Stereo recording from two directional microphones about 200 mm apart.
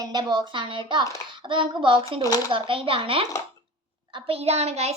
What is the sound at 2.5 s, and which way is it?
A child's voice, 25° right (ahead or behind).